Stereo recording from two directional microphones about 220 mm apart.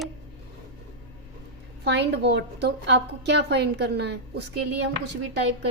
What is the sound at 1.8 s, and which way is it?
Speech, 50° right (ahead or behind).